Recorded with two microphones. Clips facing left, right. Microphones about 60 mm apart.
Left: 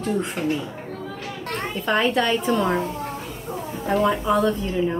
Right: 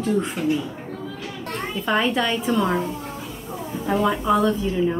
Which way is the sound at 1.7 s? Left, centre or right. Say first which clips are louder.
Left 1 dB; centre.